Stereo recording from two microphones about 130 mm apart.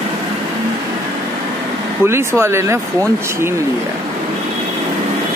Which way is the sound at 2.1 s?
20° right (ahead or behind).